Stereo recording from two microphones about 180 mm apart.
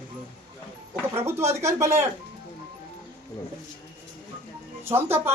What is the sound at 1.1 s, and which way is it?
Speech, 15° right (ahead or behind).